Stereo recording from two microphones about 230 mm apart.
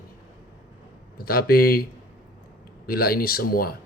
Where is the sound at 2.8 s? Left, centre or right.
Left.